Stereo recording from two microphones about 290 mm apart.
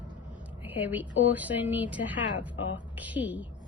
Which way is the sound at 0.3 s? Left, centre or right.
Centre.